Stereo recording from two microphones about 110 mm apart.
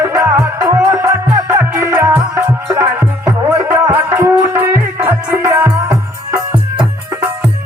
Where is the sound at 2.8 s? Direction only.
15° right (ahead or behind).